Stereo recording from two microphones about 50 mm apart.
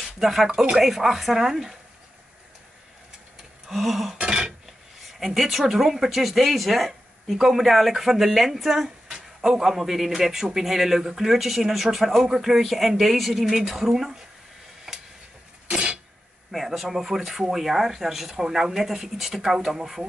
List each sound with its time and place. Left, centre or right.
0.0 s speech: centre
3.6 s a sound: centre
4.1 s dishes: centre
5.2 s speech: centre
6.9 s speech: centre
14.9 s a sound: centre
16.5 s speech: centre